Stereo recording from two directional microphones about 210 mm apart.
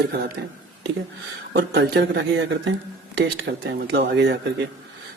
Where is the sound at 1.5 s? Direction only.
55° right (ahead or behind).